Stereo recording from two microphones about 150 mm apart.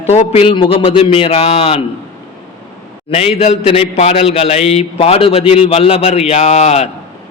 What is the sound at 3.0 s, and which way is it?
A man's voice, 40° left (ahead or behind).